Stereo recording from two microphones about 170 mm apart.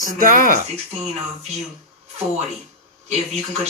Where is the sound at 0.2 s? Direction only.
50° right (ahead or behind).